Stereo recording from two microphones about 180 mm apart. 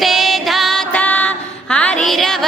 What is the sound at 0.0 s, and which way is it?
Music, centre (ahead or behind).